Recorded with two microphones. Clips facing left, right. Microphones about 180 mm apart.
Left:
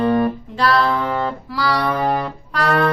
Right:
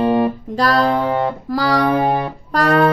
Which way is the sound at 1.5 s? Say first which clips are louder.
Right 5 dB; 45° right (ahead or behind).